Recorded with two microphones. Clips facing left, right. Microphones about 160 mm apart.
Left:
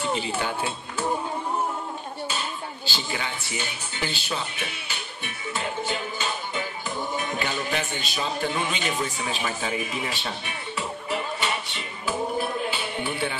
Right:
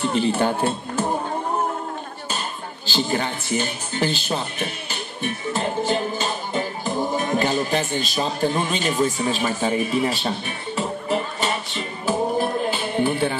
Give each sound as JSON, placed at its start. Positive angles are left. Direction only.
{"t": 0.3, "sound": "speech", "side_deg": -50}
{"t": 2.9, "sound": "speech", "side_deg": -45}
{"t": 10.8, "sound": "music", "side_deg": -40}